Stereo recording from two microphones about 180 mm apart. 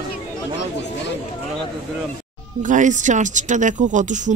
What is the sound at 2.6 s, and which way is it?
Speech, 45° right (ahead or behind).